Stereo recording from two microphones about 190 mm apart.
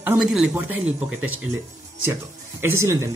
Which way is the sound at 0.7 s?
90° right.